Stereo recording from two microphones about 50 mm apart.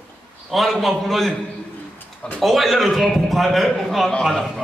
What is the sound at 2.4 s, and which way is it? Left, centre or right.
A man's voice, centre.